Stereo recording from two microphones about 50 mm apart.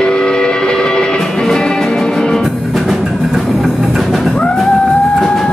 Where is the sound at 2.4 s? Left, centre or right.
Centre.